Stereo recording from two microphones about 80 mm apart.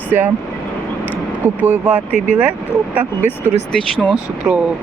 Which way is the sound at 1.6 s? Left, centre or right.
Centre.